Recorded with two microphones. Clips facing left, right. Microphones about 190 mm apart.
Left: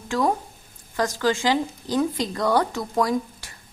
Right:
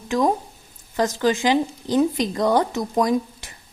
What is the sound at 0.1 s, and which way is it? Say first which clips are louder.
A woman's voice: right 3 dB; 20° right (ahead or behind).